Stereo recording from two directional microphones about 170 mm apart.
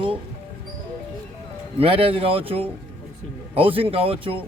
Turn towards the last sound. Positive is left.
turn(degrees=-30)  # may be behind; listen again after turning